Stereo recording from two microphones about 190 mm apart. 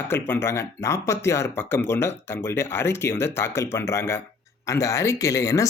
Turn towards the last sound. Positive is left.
turn(degrees=15)  # may be behind; listen again after turning